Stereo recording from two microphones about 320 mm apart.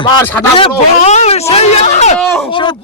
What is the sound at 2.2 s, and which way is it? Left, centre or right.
Speech, centre.